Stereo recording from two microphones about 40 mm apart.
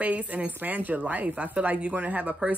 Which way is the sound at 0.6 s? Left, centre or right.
Right.